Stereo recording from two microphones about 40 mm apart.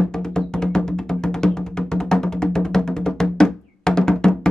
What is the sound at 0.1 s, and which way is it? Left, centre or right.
Music, centre.